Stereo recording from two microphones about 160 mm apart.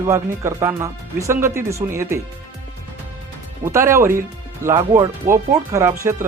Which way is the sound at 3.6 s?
15° right (ahead or behind).